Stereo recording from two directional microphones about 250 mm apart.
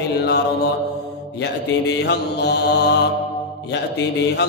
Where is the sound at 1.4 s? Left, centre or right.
Left.